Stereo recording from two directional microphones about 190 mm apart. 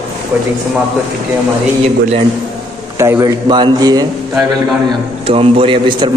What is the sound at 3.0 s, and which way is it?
A man's voice, 15° right (ahead or behind).